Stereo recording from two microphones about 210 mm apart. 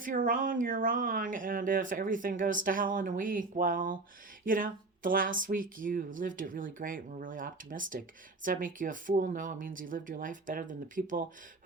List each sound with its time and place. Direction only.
0.0 s speech: 40° right (ahead or behind)